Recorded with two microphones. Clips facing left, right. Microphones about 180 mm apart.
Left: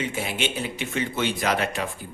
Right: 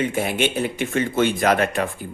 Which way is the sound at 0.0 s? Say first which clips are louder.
Right 6 dB; 50° right (ahead or behind).